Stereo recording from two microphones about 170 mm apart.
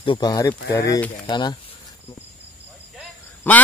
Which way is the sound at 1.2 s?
25° left (ahead or behind).